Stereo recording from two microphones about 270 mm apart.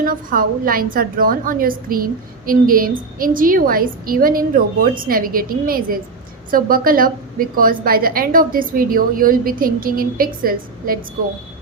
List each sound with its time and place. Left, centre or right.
0.0 s a woman's voice: right